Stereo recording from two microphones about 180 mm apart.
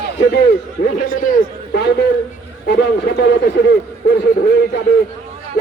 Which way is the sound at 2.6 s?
65° left (ahead or behind).